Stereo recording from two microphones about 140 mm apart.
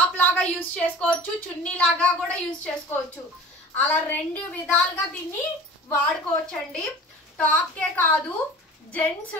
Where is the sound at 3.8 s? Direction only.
10° left (ahead or behind).